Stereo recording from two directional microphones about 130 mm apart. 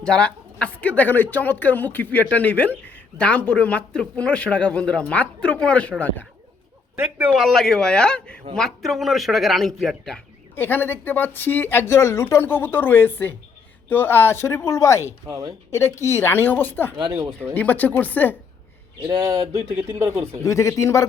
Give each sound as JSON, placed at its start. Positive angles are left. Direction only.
{"t": 0.0, "sound": "speech", "side_deg": 10}
{"t": 6.9, "sound": "speech", "side_deg": -15}
{"t": 7.3, "sound": "a man's voice", "side_deg": 0}
{"t": 10.5, "sound": "speech", "side_deg": 15}
{"t": 15.0, "sound": "speech", "side_deg": -25}
{"t": 16.0, "sound": "speech", "side_deg": 20}
{"t": 16.9, "sound": "speech", "side_deg": -35}
{"t": 17.5, "sound": "speech", "side_deg": 15}
{"t": 19.7, "sound": "speech", "side_deg": -20}
{"t": 20.4, "sound": "speech", "side_deg": 20}